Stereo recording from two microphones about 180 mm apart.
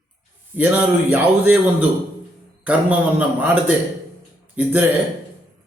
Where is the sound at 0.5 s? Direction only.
10° right (ahead or behind).